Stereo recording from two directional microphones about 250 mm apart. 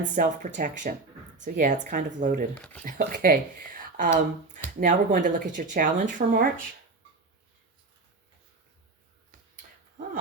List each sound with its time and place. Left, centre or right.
0.2 s speech: right
3.8 s a sound: right
4.5 s speech: right